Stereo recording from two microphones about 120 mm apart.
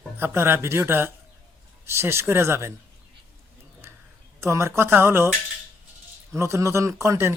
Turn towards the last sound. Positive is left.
turn(degrees=-20)  # may be behind; listen again after turning